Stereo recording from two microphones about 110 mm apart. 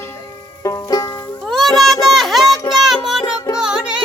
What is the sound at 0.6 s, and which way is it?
Banjo, 30° left (ahead or behind).